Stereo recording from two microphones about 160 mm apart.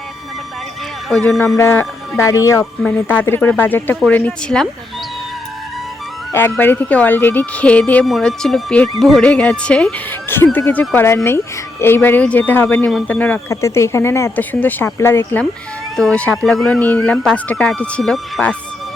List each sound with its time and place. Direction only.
1.1 s speech: 5° left (ahead or behind)
1.5 s speech: 15° left (ahead or behind)
2.8 s speech: 10° left (ahead or behind)
6.3 s speech: 15° left (ahead or behind)